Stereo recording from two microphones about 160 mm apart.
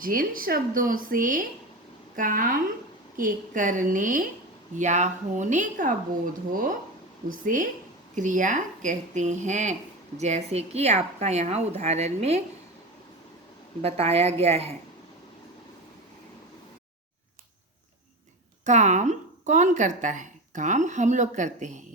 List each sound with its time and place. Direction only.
0.0 s speech: 60° right (ahead or behind); by 12.4 s 45° right (ahead or behind)
13.8 s speech: 40° right (ahead or behind)
18.6 s speech: 45° right (ahead or behind)